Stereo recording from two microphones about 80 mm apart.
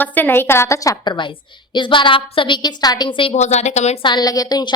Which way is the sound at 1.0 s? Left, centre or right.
Left.